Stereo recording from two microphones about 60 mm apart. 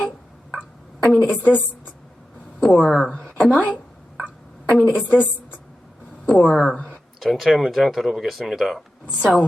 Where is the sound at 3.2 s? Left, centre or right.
Centre.